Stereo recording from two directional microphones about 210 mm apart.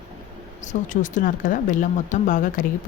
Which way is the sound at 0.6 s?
35° left (ahead or behind).